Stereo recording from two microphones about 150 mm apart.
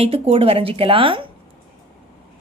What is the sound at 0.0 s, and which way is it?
A woman's voice, 40° right (ahead or behind).